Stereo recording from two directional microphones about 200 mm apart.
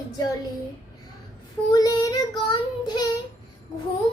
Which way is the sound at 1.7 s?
20° left (ahead or behind).